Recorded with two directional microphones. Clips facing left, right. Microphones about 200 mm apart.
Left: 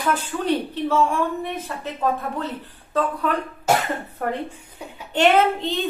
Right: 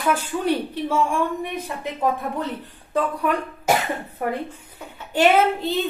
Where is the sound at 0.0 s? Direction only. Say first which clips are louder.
Right 1 dB; 10° right (ahead or behind).